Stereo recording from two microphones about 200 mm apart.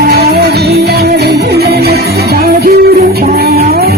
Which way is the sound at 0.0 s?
50° right (ahead or behind).